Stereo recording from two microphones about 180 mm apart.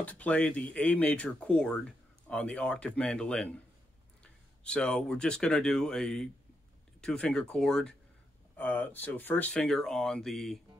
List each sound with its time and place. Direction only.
0.0 s speech: 10° left (ahead or behind)